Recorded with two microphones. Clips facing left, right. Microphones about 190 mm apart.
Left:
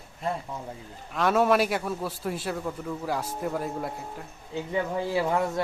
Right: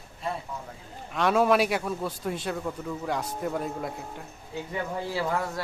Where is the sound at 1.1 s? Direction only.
Centre (ahead or behind).